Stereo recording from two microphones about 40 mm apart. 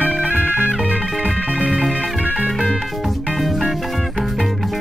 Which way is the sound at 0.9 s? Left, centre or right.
Right.